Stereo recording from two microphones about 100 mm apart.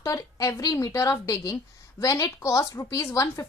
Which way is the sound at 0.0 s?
35° left (ahead or behind).